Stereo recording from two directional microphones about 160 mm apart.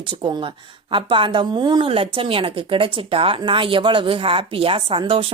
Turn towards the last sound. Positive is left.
turn(degrees=-35)  # may be behind; listen again after turning